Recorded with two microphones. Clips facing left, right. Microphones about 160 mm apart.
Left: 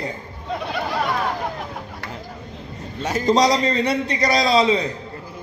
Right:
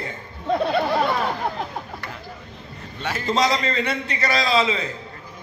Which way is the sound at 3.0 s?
40° left (ahead or behind).